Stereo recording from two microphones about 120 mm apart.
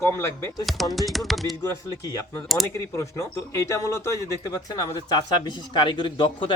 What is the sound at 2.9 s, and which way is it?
Speech, 25° left (ahead or behind).